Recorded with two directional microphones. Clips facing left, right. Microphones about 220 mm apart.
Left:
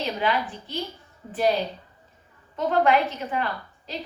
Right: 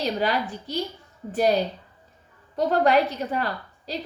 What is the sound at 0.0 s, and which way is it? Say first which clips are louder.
Speech: right 1 dB; 40° right (ahead or behind).